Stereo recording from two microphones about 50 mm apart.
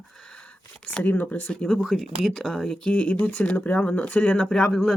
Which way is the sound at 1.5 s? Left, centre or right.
Left.